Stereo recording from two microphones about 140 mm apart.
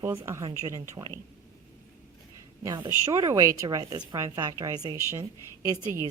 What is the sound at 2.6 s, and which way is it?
A woman's voice, 25° right (ahead or behind).